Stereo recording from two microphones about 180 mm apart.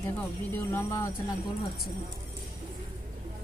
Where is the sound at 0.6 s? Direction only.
15° left (ahead or behind).